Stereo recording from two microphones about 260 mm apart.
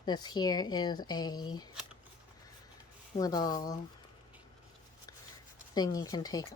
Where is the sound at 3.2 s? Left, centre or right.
Centre.